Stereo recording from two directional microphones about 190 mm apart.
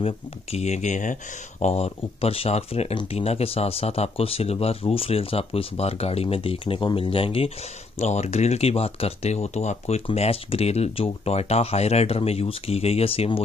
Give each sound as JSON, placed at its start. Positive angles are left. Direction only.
{"t": 0.0, "sound": "speech", "side_deg": 35}